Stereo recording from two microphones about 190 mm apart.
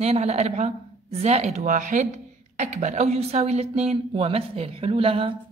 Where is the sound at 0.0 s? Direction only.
35° right (ahead or behind).